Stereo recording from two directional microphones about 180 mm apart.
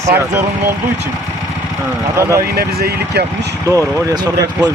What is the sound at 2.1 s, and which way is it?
Speech, 15° right (ahead or behind).